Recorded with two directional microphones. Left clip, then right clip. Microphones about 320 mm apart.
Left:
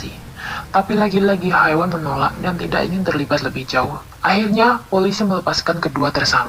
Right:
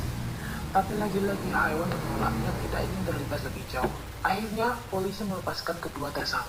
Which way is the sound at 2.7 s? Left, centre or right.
Left.